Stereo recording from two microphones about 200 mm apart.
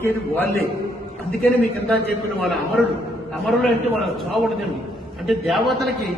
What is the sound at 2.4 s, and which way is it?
Speech, centre (ahead or behind).